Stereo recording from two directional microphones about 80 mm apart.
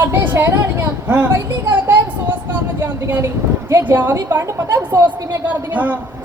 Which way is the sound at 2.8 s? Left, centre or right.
Right.